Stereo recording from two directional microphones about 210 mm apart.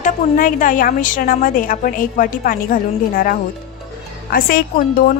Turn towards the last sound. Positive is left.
turn(degrees=45)  # may be behind; listen again after turning